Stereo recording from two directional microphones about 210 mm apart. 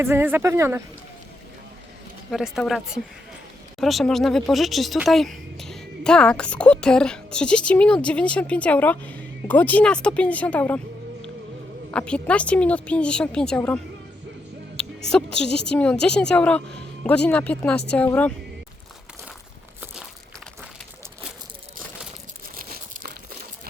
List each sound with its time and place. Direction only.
0.0 s speech: 10° right (ahead or behind)
2.3 s speech: centre (ahead or behind)
11.9 s speech: 5° left (ahead or behind)
15.1 s speech: 5° left (ahead or behind)
22.7 s crumpling: 40° right (ahead or behind)